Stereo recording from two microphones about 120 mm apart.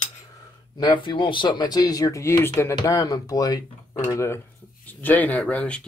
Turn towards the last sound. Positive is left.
turn(degrees=10)  # may be behind; listen again after turning